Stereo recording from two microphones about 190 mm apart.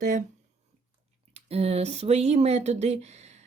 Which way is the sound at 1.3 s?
35° right (ahead or behind).